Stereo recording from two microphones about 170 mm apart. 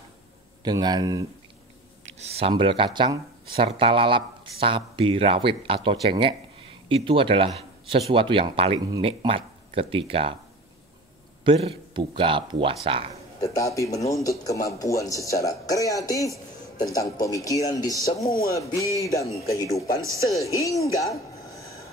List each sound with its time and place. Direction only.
0.7 s speech: 25° right (ahead or behind)
2.1 s a man's voice: 35° right (ahead or behind)
11.4 s speech: 35° right (ahead or behind)
13.4 s a man's voice: 20° left (ahead or behind)
20.0 s speech: 20° right (ahead or behind)
20.2 s a man's voice: 20° left (ahead or behind)
20.8 s a sound: 20° left (ahead or behind)